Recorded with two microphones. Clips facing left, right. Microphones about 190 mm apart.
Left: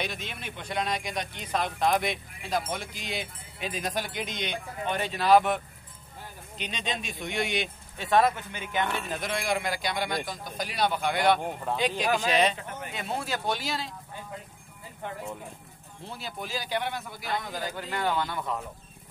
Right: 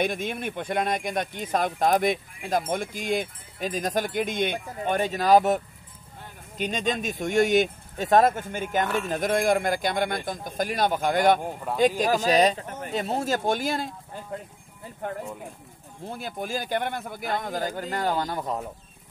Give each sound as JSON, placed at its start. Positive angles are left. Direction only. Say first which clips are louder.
{"t": 0.0, "sound": "speech", "louder": "right 8 dB", "side_deg": -50}
{"t": 6.6, "sound": "speech", "louder": "right 8 dB", "side_deg": -45}
{"t": 11.7, "sound": "speech", "louder": "right 3 dB", "side_deg": -10}
{"t": 12.0, "sound": "speech", "louder": "right 4 dB", "side_deg": -40}
{"t": 16.1, "sound": "speech", "louder": "right 5 dB", "side_deg": -50}